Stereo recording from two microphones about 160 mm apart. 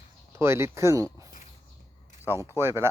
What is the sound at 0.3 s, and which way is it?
Speech, 15° right (ahead or behind).